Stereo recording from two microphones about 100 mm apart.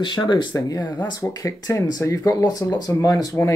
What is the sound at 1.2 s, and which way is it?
Speech, 35° left (ahead or behind).